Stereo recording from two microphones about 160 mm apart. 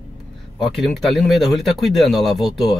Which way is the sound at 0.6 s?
Centre (ahead or behind).